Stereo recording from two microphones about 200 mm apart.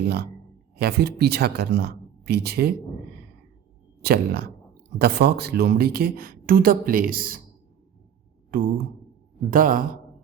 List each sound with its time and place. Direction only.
0.8 s speech: 55° right (ahead or behind)
4.0 s speech: 50° right (ahead or behind)
8.5 s speech: 45° right (ahead or behind)